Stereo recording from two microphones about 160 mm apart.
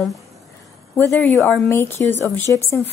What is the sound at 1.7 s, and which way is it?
Speech, 15° left (ahead or behind).